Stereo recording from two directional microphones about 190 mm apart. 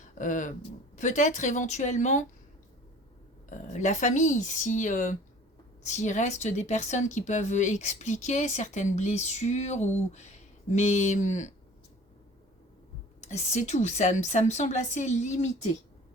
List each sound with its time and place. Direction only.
0.0 s speech: 40° left (ahead or behind)
3.5 s speech: 40° left (ahead or behind)
13.2 s speech: 35° left (ahead or behind)